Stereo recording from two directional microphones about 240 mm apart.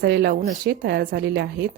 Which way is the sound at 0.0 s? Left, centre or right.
Right.